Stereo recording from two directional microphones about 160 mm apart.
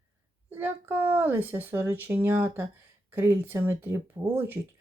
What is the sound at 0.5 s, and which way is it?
Speech, 10° right (ahead or behind).